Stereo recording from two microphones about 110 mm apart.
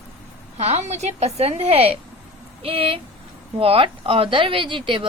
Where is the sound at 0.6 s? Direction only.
85° right.